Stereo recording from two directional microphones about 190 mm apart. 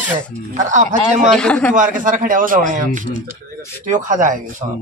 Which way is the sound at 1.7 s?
45° right (ahead or behind).